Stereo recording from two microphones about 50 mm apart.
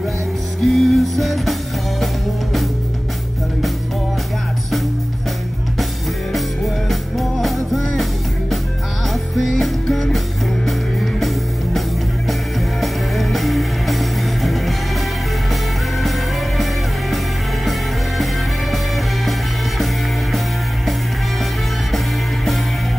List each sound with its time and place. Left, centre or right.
0.7 s music: centre
6.9 s music: centre
17.6 s music: centre
21.9 s music: centre